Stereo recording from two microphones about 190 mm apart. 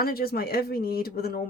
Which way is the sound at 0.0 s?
55° left (ahead or behind).